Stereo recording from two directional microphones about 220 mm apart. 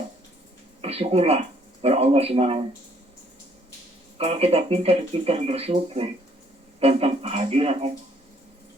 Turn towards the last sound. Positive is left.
turn(degrees=-25)  # may be behind; listen again after turning